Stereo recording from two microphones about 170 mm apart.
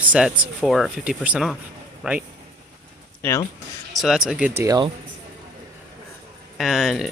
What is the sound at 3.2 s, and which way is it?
Speech, 15° left (ahead or behind).